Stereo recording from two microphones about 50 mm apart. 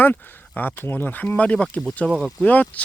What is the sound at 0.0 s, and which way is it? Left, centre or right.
Speech, left.